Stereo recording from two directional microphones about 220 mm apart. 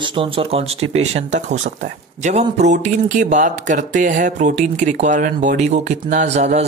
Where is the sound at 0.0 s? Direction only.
25° right (ahead or behind).